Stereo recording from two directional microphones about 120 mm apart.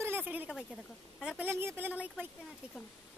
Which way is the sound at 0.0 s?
15° right (ahead or behind).